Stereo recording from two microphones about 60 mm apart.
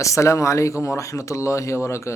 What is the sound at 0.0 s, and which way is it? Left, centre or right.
Speech, left.